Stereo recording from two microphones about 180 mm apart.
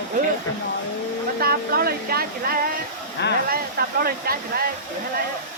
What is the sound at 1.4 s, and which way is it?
Speech, 55° right (ahead or behind).